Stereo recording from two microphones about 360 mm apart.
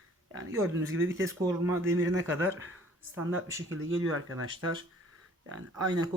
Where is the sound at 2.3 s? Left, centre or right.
Right.